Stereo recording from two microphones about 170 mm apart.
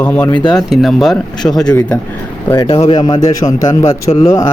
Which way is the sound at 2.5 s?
20° left (ahead or behind).